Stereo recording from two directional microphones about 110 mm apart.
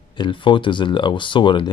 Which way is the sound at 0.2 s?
45° left (ahead or behind).